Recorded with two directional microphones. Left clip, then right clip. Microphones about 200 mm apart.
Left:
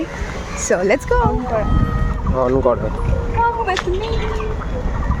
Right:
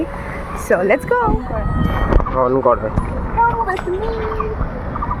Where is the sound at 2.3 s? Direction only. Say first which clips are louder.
Right 1 dB; 10° left (ahead or behind).